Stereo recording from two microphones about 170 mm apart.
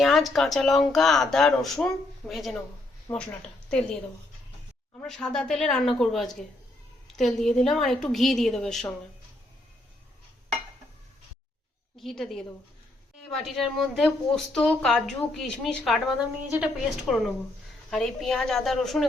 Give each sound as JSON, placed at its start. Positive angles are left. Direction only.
{"t": 0.0, "sound": "a woman's voice", "side_deg": 0}
{"t": 3.1, "sound": "a woman's voice", "side_deg": 15}
{"t": 3.7, "sound": "a woman's voice", "side_deg": 5}
{"t": 5.0, "sound": "a woman's voice", "side_deg": 5}
{"t": 11.9, "sound": "a woman's voice", "side_deg": 0}